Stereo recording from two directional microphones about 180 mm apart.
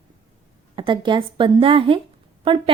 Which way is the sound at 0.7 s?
25° right (ahead or behind).